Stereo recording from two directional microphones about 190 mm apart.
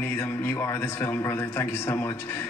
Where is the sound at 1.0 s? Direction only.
15° left (ahead or behind).